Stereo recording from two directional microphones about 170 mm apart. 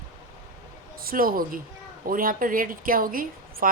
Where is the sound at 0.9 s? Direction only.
60° right (ahead or behind).